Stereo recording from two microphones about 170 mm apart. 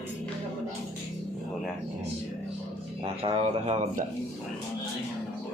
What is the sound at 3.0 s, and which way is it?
Speech, 30° right (ahead or behind).